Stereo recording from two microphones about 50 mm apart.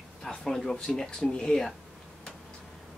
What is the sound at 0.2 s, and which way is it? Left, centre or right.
Speech, centre.